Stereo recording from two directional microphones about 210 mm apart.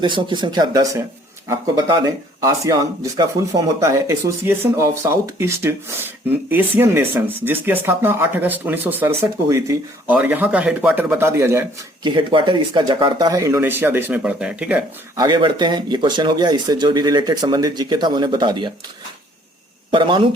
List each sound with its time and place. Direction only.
0.0 s speech: 20° right (ahead or behind); by 15.2 s 5° right (ahead or behind)
15.2 s speech: 20° right (ahead or behind)
19.9 s speech: 25° right (ahead or behind)